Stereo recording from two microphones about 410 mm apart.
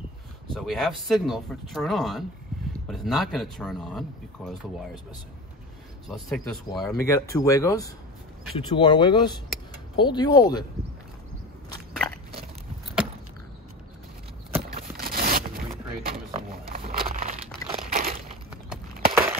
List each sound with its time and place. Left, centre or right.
0.6 s speech: centre
6.0 s speech: centre
14.7 s scrape: right
16.1 s a sound: right
17.6 s crumpling: centre
19.0 s a sound: centre